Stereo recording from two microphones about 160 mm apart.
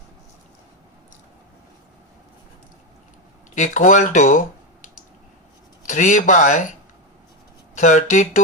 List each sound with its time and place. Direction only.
3.5 s speech: 50° left (ahead or behind)
5.8 s speech: 50° left (ahead or behind)
7.8 s speech: 50° left (ahead or behind)